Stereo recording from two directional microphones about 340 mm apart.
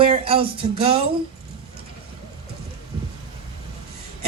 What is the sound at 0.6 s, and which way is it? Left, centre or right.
Speech, centre.